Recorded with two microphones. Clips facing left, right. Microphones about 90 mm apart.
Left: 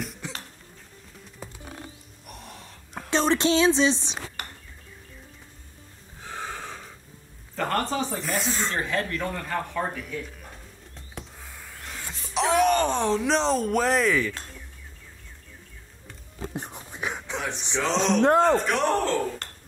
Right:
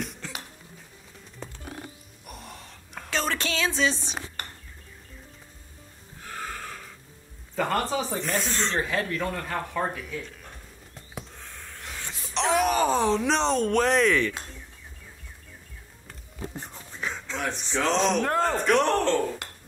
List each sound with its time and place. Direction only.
0.2 s cough: 15° left (ahead or behind)
1.4 s music: 5° left (ahead or behind)
3.1 s a sound: 25° left (ahead or behind)
6.2 s a sound: 20° left (ahead or behind)
7.5 s speech: centre (ahead or behind)
8.8 s speech: 5° right (ahead or behind)
11.3 s wail: 5° left (ahead or behind)
16.5 s whispering: 15° left (ahead or behind)
17.5 s speech: 20° left (ahead or behind)
17.8 s speech: centre (ahead or behind)